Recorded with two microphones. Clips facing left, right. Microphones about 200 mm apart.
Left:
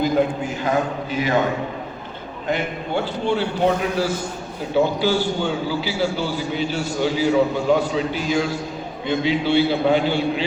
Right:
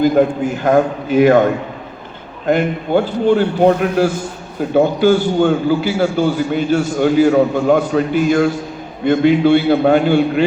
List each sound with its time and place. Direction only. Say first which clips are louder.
0.0 s a man's voice: right 7 dB; 55° right (ahead or behind)
2.5 s a man's voice: right 9 dB; 50° right (ahead or behind)